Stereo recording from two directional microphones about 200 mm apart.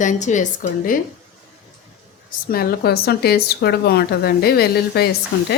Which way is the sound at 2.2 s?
50° left (ahead or behind).